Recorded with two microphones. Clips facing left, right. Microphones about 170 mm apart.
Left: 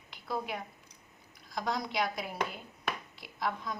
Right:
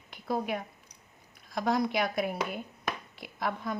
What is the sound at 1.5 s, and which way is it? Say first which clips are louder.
A woman's voice: right 5 dB; 55° right (ahead or behind).